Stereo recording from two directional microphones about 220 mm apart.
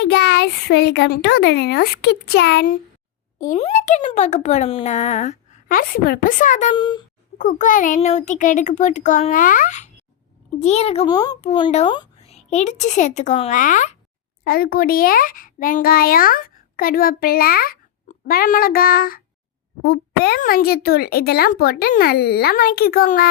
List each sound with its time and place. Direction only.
0.0 s speech: 50° left (ahead or behind)
3.5 s speech: 30° left (ahead or behind)
6.7 s speech: 20° left (ahead or behind)
7.3 s a child's voice: 35° left (ahead or behind)